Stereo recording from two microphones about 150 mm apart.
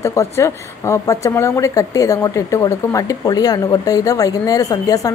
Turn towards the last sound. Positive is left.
turn(degrees=25)  # may be behind; listen again after turning